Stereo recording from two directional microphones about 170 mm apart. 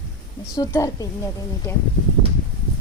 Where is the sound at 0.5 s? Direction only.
20° left (ahead or behind).